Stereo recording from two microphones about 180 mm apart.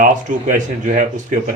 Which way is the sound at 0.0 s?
45° right (ahead or behind).